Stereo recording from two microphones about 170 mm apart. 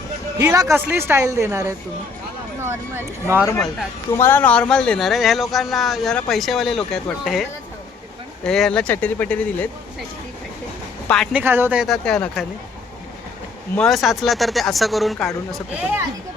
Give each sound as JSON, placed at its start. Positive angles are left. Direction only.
{"t": 0.3, "sound": "a woman's voice", "side_deg": -20}
{"t": 4.2, "sound": "speech", "side_deg": 10}
{"t": 8.4, "sound": "speech", "side_deg": 5}
{"t": 11.1, "sound": "speech", "side_deg": 0}
{"t": 11.3, "sound": "a woman's voice", "side_deg": -15}
{"t": 11.9, "sound": "speech", "side_deg": 5}
{"t": 13.7, "sound": "speech", "side_deg": 0}
{"t": 15.8, "sound": "a woman's voice", "side_deg": -10}